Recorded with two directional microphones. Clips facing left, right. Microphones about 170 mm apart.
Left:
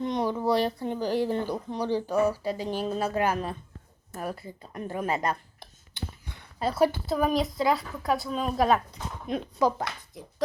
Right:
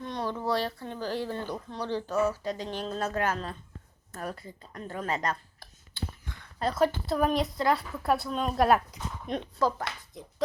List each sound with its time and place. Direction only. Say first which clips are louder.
0.0 s speech: left 5 dB; 15° left (ahead or behind)
5.5 s a sound: even; 20° left (ahead or behind)
6.6 s a woman's voice: left 2 dB; 5° left (ahead or behind)
9.6 s speech: left 3 dB; 15° left (ahead or behind)
10.2 s a woman's voice: left 1 dB; 5° left (ahead or behind)